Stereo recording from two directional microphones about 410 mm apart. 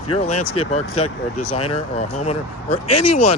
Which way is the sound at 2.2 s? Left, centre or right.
Centre.